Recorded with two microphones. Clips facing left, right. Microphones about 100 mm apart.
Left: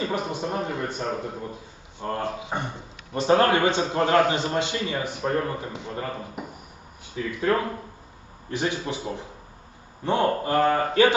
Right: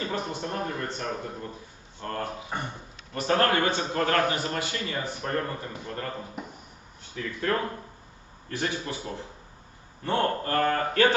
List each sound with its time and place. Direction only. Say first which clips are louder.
0.0 s a man's voice: left 4 dB; 15° left (ahead or behind)